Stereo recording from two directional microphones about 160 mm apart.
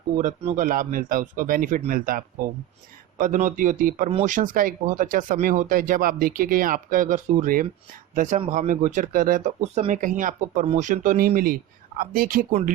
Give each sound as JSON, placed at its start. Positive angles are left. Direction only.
{"t": 0.2, "sound": "speech", "side_deg": -50}